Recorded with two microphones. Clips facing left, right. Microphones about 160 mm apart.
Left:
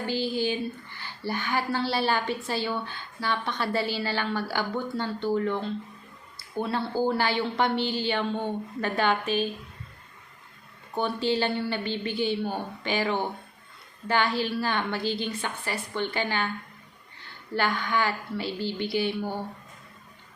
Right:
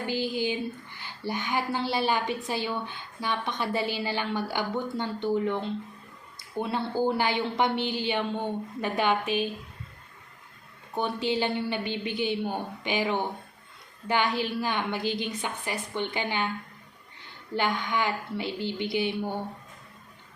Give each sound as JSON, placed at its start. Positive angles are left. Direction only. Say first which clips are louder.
{"t": 0.1, "sound": "a woman's voice", "louder": "left 1 dB", "side_deg": -15}
{"t": 11.0, "sound": "a woman's voice", "louder": "left 1 dB", "side_deg": -15}
{"t": 17.5, "sound": "a woman's voice", "louder": "left 1 dB", "side_deg": -20}